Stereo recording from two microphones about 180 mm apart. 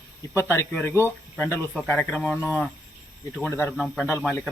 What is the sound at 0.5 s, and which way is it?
Speech, 15° left (ahead or behind).